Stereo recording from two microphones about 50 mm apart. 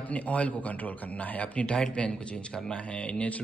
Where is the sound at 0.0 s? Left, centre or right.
Left.